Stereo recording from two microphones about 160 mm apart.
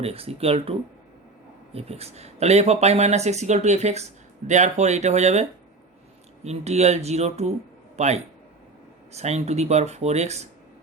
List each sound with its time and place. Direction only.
0.0 s a man's voice: 40° right (ahead or behind)